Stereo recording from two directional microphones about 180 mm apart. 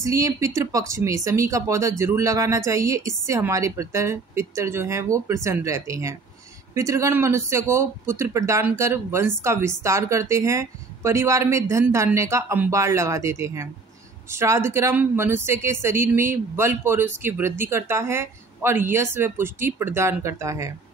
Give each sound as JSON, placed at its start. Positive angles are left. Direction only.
{"t": 0.0, "sound": "speech", "side_deg": -15}